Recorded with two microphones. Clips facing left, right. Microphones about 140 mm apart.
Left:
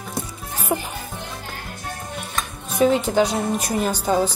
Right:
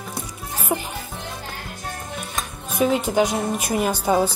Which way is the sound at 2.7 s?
10° right (ahead or behind).